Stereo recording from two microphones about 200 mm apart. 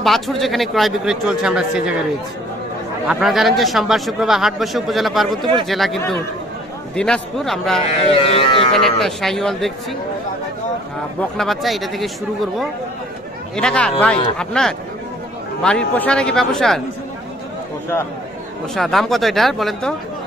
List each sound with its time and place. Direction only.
0.0 s a man's voice: centre (ahead or behind)
3.1 s a man's voice: centre (ahead or behind)
8.2 s speech: 30° left (ahead or behind)
8.7 s a man's voice: centre (ahead or behind)
11.1 s a man's voice: centre (ahead or behind)
13.6 s a man's voice: 5° left (ahead or behind)
18.8 s a man's voice: centre (ahead or behind)